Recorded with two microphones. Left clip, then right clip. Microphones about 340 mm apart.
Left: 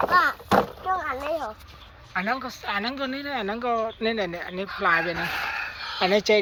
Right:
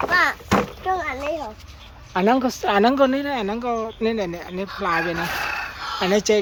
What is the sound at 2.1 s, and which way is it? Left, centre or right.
Speech, right.